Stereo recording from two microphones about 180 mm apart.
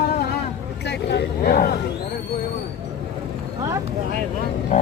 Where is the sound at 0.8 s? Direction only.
70° left (ahead or behind).